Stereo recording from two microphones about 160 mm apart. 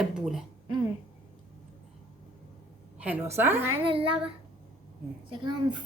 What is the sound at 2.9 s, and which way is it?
Speech, 10° right (ahead or behind).